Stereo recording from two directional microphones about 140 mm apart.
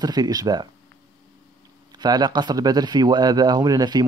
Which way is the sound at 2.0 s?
30° right (ahead or behind).